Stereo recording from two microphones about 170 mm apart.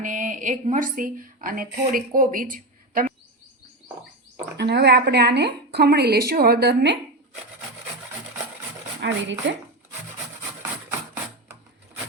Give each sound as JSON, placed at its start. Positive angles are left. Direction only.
{"t": 0.0, "sound": "a woman's voice", "side_deg": -50}
{"t": 4.5, "sound": "a woman's voice", "side_deg": -80}
{"t": 9.0, "sound": "speech", "side_deg": -90}